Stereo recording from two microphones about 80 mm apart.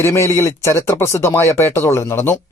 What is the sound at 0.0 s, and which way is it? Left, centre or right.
Speech, left.